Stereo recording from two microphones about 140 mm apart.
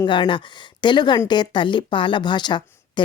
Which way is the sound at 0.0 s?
35° left (ahead or behind).